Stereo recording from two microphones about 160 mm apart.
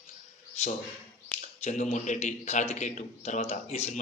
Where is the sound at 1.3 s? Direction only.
45° left (ahead or behind).